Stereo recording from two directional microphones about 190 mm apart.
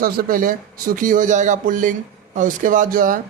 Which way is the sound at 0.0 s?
50° right (ahead or behind).